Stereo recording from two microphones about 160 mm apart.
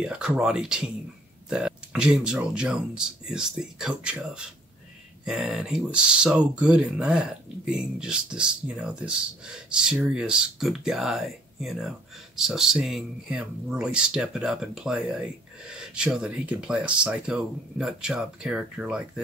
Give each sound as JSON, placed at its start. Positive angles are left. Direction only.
{"t": 0.0, "sound": "speech", "side_deg": -5}